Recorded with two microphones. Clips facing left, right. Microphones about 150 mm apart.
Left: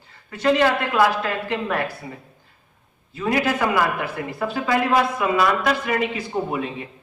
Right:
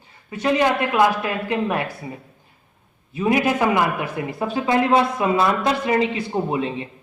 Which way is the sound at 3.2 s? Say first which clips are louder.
Right 2 dB; 15° right (ahead or behind).